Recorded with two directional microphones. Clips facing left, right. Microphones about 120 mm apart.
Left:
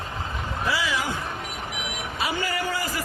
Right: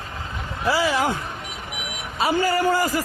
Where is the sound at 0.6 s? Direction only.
40° right (ahead or behind).